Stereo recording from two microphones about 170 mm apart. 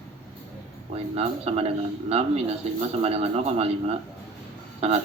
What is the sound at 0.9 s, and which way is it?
Speech, 40° right (ahead or behind).